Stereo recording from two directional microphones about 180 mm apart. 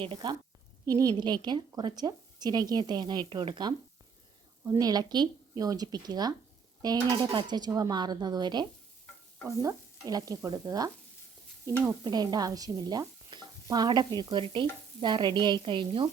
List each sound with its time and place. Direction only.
0.0 s speech: 25° right (ahead or behind)